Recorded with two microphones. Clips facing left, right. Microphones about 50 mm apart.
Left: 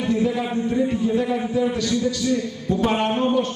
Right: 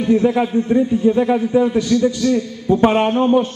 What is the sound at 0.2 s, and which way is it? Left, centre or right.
A man's voice, right.